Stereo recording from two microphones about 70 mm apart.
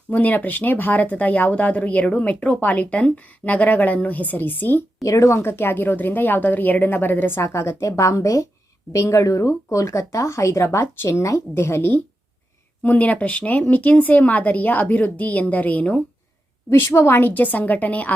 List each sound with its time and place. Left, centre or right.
0.1 s speech: left
5.0 s speech: left
5.4 s a woman's voice: left
12.8 s speech: left
16.7 s speech: left